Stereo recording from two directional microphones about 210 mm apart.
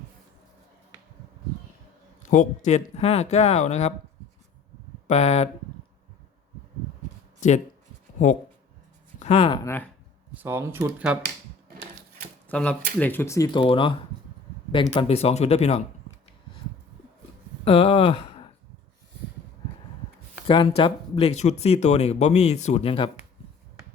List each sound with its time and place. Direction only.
2.2 s speech: 35° left (ahead or behind)
5.0 s speech: 30° left (ahead or behind)
9.1 s speech: 30° left (ahead or behind)
9.6 s speech: 10° left (ahead or behind)
10.3 s speech: 10° right (ahead or behind)
12.5 s speech: 5° left (ahead or behind); by 15.8 s 30° left (ahead or behind)
17.7 s speech: 25° left (ahead or behind)
20.5 s speech: 25° left (ahead or behind)